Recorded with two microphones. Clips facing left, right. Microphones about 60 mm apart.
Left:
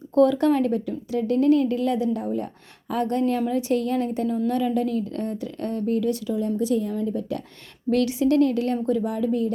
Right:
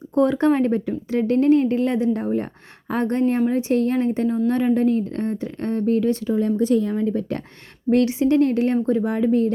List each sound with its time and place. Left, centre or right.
0.1 s speech: right
7.9 s speech: right